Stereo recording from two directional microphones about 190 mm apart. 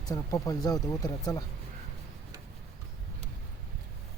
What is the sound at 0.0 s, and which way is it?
Speech, 20° left (ahead or behind).